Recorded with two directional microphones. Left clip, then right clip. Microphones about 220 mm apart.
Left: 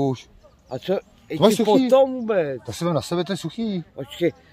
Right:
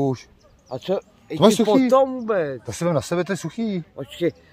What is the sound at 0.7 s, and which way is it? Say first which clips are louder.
Speech: even; 10° left (ahead or behind).